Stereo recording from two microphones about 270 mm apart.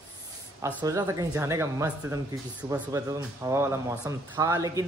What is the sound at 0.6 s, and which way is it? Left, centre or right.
Speech, centre.